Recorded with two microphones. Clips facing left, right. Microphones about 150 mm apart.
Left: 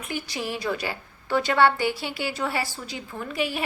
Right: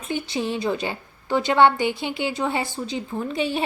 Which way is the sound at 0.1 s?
25° right (ahead or behind).